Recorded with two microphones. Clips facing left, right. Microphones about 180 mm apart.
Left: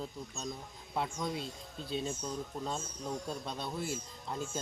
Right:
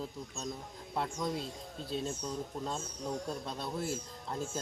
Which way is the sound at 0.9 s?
Centre (ahead or behind).